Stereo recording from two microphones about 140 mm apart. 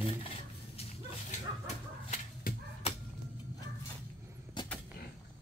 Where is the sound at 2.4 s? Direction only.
90° left.